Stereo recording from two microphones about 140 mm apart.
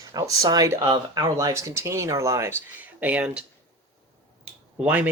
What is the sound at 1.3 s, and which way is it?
Speech, 20° right (ahead or behind).